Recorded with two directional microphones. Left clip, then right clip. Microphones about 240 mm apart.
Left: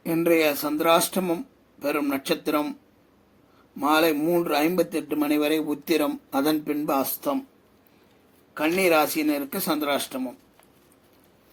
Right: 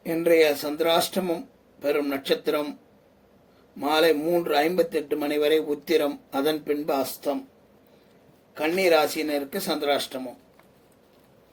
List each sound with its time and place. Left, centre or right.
0.0 s a man's voice: left
3.8 s a man's voice: left
8.5 s a man's voice: left